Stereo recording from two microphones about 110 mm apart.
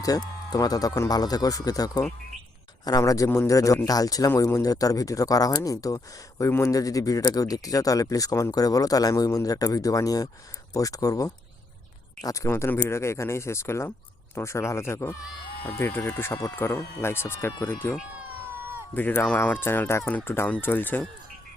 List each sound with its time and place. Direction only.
0.0 s speech: 35° left (ahead or behind); by 17.9 s 20° left (ahead or behind)
18.9 s speech: 15° left (ahead or behind)